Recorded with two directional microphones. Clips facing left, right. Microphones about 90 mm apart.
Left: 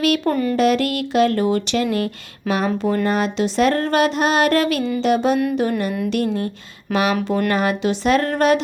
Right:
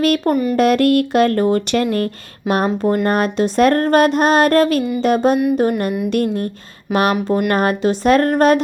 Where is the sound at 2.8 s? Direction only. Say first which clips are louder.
Right 3 dB; 20° right (ahead or behind).